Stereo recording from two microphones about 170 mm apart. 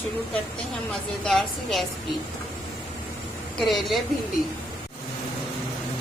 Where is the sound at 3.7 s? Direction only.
Centre (ahead or behind).